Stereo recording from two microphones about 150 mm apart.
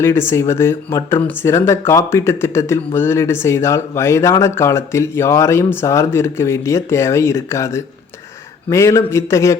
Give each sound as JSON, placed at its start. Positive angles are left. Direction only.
{"t": 0.0, "sound": "speech", "side_deg": 15}